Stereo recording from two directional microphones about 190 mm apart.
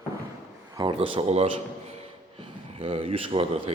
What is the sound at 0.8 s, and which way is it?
Speech, 25° right (ahead or behind).